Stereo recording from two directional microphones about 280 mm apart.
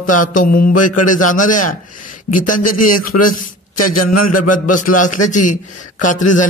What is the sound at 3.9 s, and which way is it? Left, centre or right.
Speech, left.